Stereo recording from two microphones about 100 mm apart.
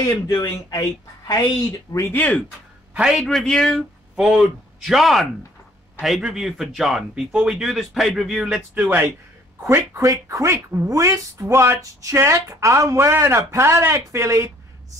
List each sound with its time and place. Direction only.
0.3 s speech: 40° left (ahead or behind)
2.1 s speech: 15° left (ahead or behind)
2.9 s a man's voice: 5° right (ahead or behind)
3.3 s speech: 5° left (ahead or behind); by 9.0 s 15° right (ahead or behind)
9.9 s speech: 35° right (ahead or behind)